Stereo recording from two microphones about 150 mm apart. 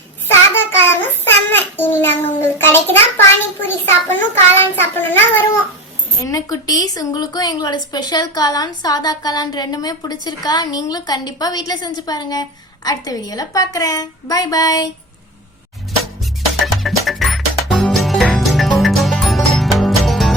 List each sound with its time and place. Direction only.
0.9 s child singing: 15° left (ahead or behind)
6.2 s a woman's voice: 25° left (ahead or behind)
16.7 s music: centre (ahead or behind)